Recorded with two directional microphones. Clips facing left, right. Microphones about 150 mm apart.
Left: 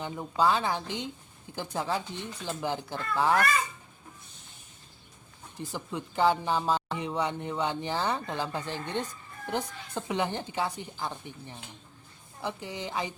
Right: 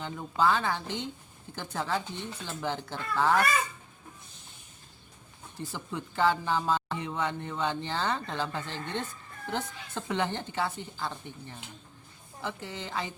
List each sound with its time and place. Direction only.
0.0 s speech: 15° left (ahead or behind)
5.5 s speech: 15° left (ahead or behind)